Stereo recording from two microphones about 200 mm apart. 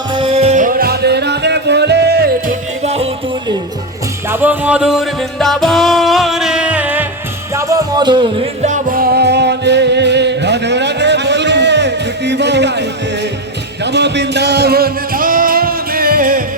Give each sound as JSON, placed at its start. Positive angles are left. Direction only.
{"t": 0.1, "sound": "music", "side_deg": -25}
{"t": 2.8, "sound": "music", "side_deg": -30}
{"t": 4.3, "sound": "music", "side_deg": -10}
{"t": 8.6, "sound": "music", "side_deg": -40}